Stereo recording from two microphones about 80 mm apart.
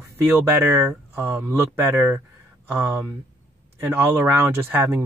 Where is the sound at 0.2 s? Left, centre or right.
Right.